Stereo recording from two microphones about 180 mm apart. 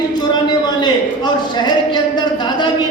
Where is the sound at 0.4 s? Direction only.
25° left (ahead or behind).